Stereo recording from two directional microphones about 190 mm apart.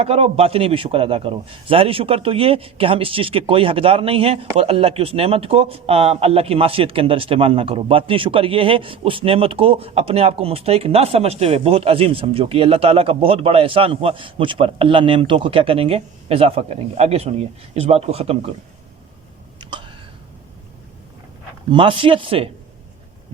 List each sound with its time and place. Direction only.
0.0 s a man's voice: 30° right (ahead or behind)
21.7 s a man's voice: 25° right (ahead or behind)